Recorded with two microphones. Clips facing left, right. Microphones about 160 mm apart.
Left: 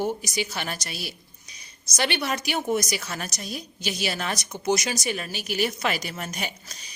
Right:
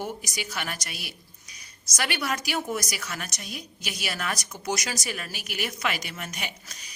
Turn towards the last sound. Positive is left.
turn(degrees=35)  # may be behind; listen again after turning